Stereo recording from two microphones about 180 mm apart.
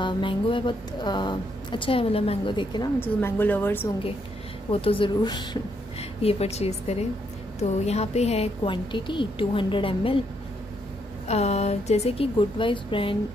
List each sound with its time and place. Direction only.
0.0 s speech: 30° left (ahead or behind)
3.0 s speech: 10° left (ahead or behind)
4.6 s a woman's voice: 30° left (ahead or behind)
11.2 s a woman's voice: 35° left (ahead or behind)